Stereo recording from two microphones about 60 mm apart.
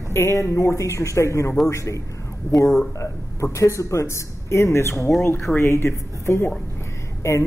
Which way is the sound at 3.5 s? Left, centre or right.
Left.